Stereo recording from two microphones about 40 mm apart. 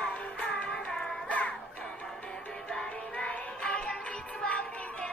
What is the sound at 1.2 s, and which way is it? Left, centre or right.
Music, left.